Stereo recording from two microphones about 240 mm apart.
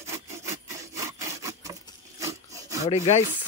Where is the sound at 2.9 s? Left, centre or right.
Left.